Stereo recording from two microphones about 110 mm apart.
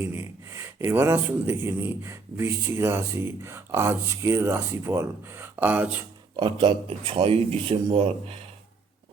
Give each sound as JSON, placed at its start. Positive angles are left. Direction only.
{"t": 0.0, "sound": "speech", "side_deg": -20}
{"t": 6.6, "sound": "speech", "side_deg": -75}
{"t": 7.0, "sound": "speech", "side_deg": -55}
{"t": 7.9, "sound": "speech", "side_deg": -65}